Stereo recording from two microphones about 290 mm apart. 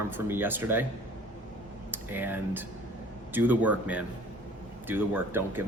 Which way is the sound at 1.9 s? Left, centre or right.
Centre.